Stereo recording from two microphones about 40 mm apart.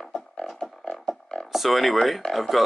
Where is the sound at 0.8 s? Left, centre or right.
Centre.